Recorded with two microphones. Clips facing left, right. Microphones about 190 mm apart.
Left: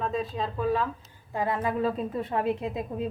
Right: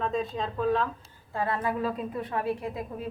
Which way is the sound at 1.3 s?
15° left (ahead or behind).